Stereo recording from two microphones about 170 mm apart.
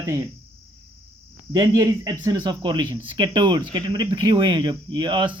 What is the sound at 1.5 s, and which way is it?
Speech, 25° right (ahead or behind).